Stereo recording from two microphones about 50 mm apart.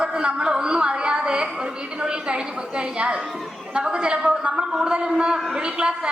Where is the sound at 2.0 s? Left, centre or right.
Centre.